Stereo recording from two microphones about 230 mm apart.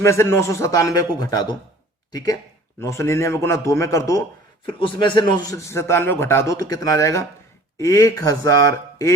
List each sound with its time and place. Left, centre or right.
0.0 s a man's voice: centre